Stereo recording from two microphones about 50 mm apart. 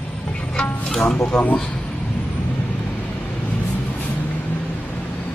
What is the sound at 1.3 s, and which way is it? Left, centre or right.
Speech, centre.